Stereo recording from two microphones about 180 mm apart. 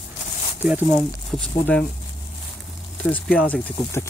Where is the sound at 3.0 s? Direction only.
5° left (ahead or behind).